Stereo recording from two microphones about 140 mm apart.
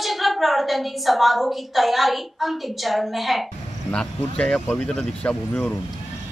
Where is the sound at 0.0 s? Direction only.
Centre (ahead or behind).